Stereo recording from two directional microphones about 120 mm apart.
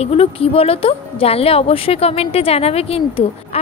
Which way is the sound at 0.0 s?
55° left (ahead or behind).